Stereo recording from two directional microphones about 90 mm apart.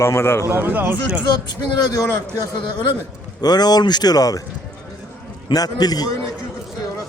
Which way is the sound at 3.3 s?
50° left (ahead or behind).